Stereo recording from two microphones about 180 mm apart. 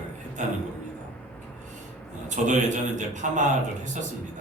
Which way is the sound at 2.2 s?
45° right (ahead or behind).